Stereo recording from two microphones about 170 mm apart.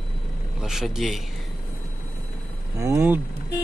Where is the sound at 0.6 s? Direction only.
Centre (ahead or behind).